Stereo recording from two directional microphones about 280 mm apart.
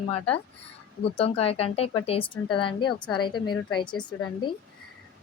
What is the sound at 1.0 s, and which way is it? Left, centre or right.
A woman's voice, left.